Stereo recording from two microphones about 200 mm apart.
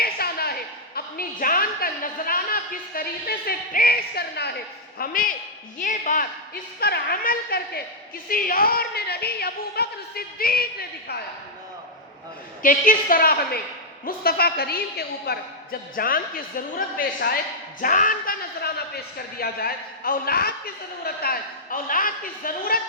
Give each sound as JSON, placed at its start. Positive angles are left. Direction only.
{"t": 0.0, "sound": "a sound", "side_deg": 50}
{"t": 4.9, "sound": "a woman's voice", "side_deg": 45}
{"t": 12.6, "sound": "a woman's voice", "side_deg": 40}